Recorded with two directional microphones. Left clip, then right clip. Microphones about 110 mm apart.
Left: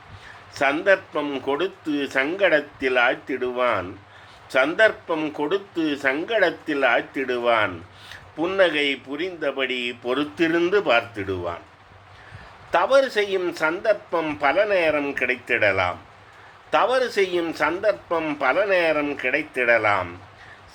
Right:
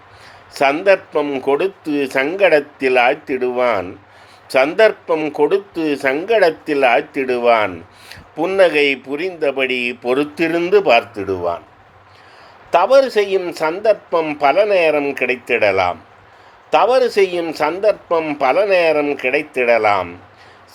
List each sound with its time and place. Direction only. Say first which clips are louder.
0.5 s a man's voice: right 6 dB; 50° right (ahead or behind)
12.7 s a man's voice: right 7 dB; 45° right (ahead or behind)